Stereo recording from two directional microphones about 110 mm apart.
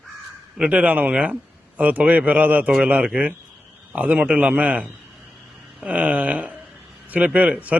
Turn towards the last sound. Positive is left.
turn(degrees=-15)  # may be behind; listen again after turning